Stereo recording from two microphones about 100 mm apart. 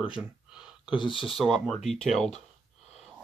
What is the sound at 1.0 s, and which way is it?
Speech, 55° left (ahead or behind).